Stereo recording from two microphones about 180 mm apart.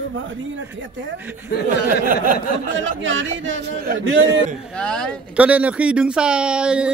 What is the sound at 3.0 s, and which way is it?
Speech, 90° right.